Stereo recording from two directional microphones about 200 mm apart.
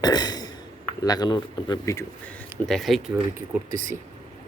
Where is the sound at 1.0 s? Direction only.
20° left (ahead or behind).